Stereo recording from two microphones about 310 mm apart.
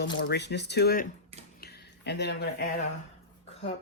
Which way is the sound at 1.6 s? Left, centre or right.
Left.